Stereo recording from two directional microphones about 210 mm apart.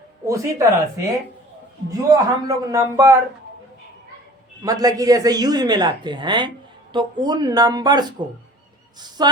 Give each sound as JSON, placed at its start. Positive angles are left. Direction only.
{"t": 0.3, "sound": "a man's voice", "side_deg": -15}
{"t": 1.9, "sound": "a man's voice", "side_deg": -15}
{"t": 4.6, "sound": "speech", "side_deg": -15}